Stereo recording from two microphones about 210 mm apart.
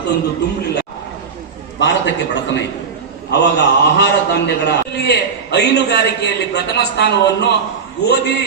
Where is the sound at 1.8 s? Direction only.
55° left (ahead or behind).